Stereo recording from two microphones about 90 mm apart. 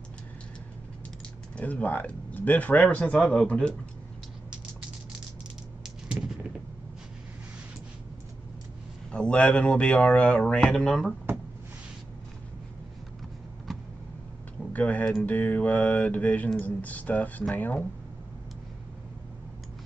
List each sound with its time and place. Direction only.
1.6 s mantra: 15° left (ahead or behind)
9.1 s mantra: 10° left (ahead or behind)
14.7 s speech: 15° left (ahead or behind)
15.2 s mantra: 20° left (ahead or behind)